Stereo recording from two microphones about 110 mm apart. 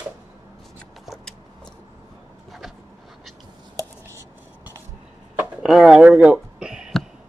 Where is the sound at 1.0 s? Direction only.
5° left (ahead or behind).